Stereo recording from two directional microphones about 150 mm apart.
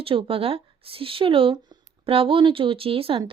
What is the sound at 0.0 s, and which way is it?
Speech, 35° right (ahead or behind).